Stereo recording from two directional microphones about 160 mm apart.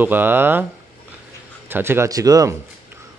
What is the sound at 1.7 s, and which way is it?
Speech, 15° right (ahead or behind).